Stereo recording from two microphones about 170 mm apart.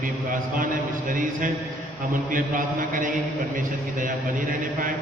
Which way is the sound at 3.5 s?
50° right (ahead or behind).